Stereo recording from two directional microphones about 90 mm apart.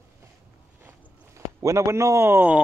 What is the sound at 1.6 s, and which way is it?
A man's voice, 35° right (ahead or behind).